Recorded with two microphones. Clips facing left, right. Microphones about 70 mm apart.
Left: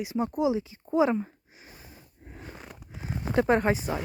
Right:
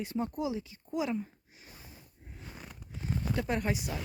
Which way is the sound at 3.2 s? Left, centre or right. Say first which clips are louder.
Left 10 dB; left.